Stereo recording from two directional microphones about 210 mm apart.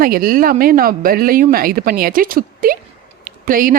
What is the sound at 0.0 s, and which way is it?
Speech, 45° right (ahead or behind).